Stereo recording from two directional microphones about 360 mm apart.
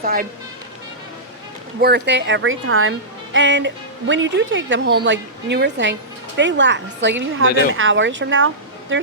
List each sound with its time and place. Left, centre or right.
0.0 s speech: right
1.8 s a woman's voice: right